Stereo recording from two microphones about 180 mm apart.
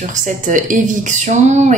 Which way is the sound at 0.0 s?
45° right (ahead or behind).